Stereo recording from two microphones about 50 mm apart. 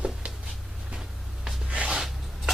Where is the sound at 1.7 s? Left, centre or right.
Right.